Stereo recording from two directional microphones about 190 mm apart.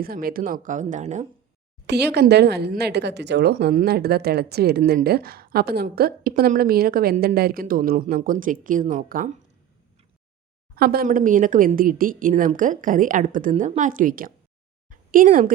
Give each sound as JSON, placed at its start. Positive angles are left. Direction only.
{"t": 0.0, "sound": "a woman's voice", "side_deg": -50}
{"t": 1.9, "sound": "a woman's voice", "side_deg": -60}
{"t": 10.8, "sound": "a woman's voice", "side_deg": -55}
{"t": 14.8, "sound": "a sound", "side_deg": -45}